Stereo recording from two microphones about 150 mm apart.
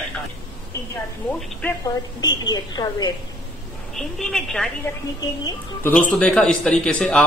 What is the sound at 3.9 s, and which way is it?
Speech, 5° left (ahead or behind).